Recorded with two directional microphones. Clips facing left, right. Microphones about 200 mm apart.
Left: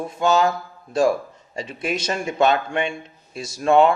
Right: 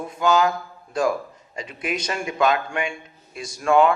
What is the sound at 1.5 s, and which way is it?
A man's voice, 25° left (ahead or behind).